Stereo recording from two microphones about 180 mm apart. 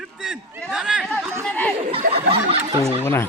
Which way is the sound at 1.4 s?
10° left (ahead or behind).